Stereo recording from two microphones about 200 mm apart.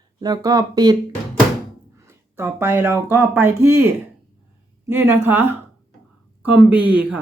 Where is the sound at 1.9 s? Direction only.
15° right (ahead or behind).